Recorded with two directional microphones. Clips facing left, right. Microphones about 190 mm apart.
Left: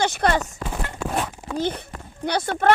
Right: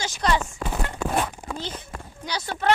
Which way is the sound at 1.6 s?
60° left (ahead or behind).